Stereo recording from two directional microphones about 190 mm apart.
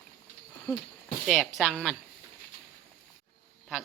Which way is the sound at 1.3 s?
Centre (ahead or behind).